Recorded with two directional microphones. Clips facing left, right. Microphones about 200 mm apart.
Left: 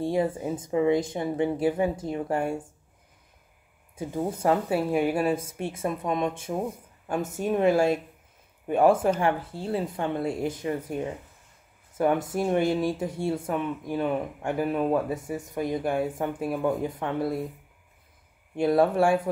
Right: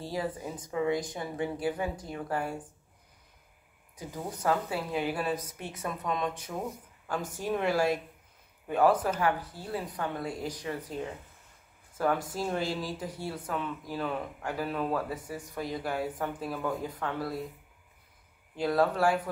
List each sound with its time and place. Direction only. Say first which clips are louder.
0.0 s speech: left 8 dB; 25° left (ahead or behind)
3.9 s speech: left 9 dB; 25° left (ahead or behind)
12.0 s speech: left 5 dB; 25° left (ahead or behind)
18.6 s speech: left 5 dB; 25° left (ahead or behind)